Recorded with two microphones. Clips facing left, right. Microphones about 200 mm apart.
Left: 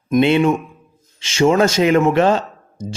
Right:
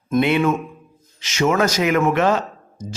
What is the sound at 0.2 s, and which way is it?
Speech, 25° left (ahead or behind).